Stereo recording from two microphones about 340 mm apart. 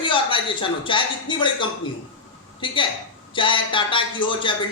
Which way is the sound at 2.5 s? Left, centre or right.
Centre.